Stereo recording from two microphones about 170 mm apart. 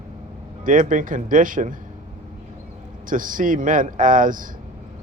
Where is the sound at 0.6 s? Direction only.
50° right (ahead or behind).